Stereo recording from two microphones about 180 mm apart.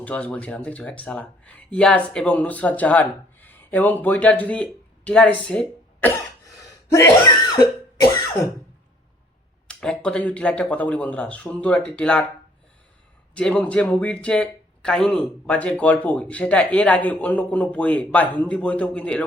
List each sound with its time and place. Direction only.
0.0 s speech: 10° left (ahead or behind)
6.9 s cough: 15° left (ahead or behind)
9.6 s speech: 5° left (ahead or behind)
13.3 s speech: 5° left (ahead or behind)